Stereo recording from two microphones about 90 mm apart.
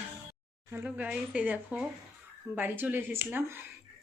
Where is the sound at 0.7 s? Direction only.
15° right (ahead or behind).